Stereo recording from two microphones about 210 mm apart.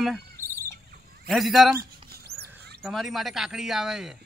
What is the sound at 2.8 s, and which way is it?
Speech, centre (ahead or behind).